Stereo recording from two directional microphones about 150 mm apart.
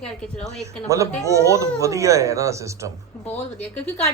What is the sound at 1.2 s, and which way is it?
Speech, 20° right (ahead or behind).